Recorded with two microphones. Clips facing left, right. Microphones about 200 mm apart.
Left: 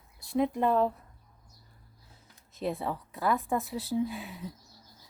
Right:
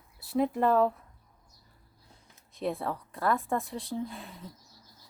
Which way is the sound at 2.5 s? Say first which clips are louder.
Even; centre (ahead or behind).